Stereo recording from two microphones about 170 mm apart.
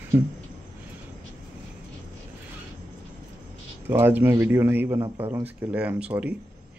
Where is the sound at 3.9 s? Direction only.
15° right (ahead or behind).